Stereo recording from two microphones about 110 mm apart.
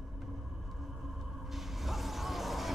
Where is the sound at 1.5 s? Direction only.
Centre (ahead or behind).